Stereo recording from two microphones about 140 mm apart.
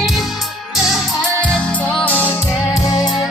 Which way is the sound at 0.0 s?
Centre (ahead or behind).